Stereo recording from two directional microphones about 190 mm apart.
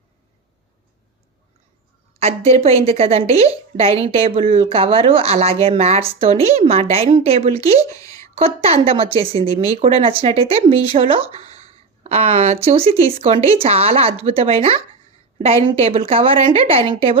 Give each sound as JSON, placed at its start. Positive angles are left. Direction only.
{"t": 2.1, "sound": "a woman's voice", "side_deg": -35}
{"t": 7.9, "sound": "a sound", "side_deg": 15}
{"t": 8.4, "sound": "a woman's voice", "side_deg": -30}